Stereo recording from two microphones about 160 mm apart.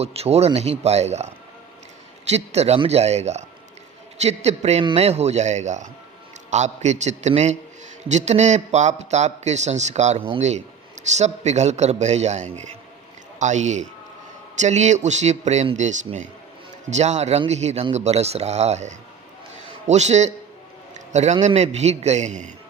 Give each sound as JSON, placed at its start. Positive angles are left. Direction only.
{"t": 0.0, "sound": "speech", "side_deg": -40}
{"t": 2.3, "sound": "a man's voice", "side_deg": -40}